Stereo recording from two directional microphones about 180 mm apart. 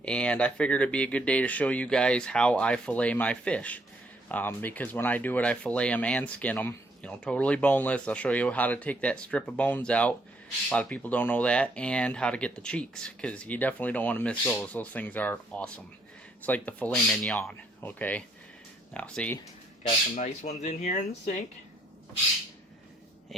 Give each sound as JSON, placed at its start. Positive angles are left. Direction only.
{"t": 0.0, "sound": "speech", "side_deg": 5}
{"t": 20.1, "sound": "speech", "side_deg": 40}